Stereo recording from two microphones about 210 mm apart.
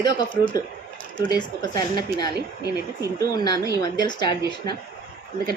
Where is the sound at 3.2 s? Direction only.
15° left (ahead or behind).